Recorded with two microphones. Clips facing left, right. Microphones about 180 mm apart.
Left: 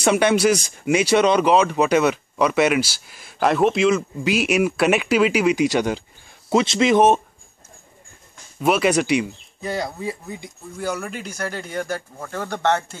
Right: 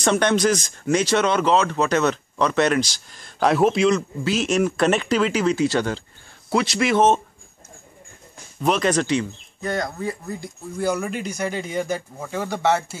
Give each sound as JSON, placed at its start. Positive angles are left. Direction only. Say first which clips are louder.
{"t": 0.0, "sound": "speech", "louder": "left 2 dB", "side_deg": 10}
{"t": 4.2, "sound": "speech", "louder": "left 1 dB", "side_deg": 10}
{"t": 8.5, "sound": "speech", "louder": "left 2 dB", "side_deg": 10}
{"t": 10.8, "sound": "speech", "louder": "right 3 dB", "side_deg": -10}